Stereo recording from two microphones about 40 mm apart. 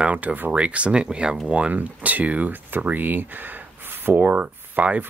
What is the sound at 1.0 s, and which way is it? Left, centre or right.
Speech, right.